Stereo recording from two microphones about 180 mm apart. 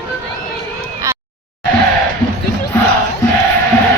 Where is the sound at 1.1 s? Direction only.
15° right (ahead or behind).